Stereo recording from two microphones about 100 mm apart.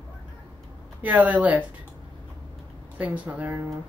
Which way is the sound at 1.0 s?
15° right (ahead or behind).